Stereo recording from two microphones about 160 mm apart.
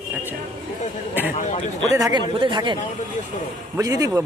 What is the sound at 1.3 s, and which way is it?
Speech, 45° left (ahead or behind).